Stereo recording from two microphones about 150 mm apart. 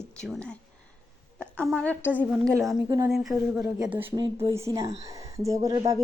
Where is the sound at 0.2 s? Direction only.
5° left (ahead or behind).